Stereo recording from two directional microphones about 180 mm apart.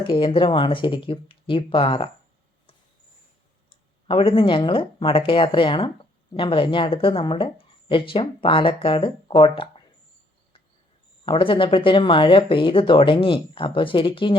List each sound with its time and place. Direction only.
0.0 s speech: 30° left (ahead or behind)
4.1 s speech: 30° left (ahead or behind)
11.3 s speech: 30° left (ahead or behind)